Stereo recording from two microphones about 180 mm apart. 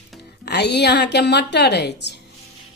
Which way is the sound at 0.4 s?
65° left (ahead or behind).